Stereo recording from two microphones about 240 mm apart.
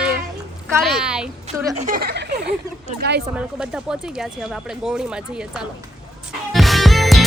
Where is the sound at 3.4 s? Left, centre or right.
Centre.